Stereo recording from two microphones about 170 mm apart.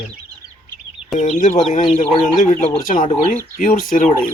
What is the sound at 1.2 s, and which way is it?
Speech, 45° left (ahead or behind).